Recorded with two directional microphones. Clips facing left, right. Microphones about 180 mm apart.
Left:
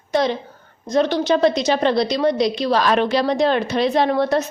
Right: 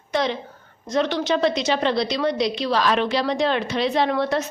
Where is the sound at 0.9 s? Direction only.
40° left (ahead or behind).